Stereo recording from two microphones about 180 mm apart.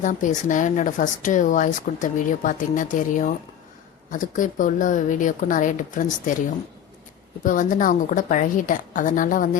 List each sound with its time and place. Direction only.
0.0 s speech: 45° left (ahead or behind)
7.4 s speech: 45° left (ahead or behind)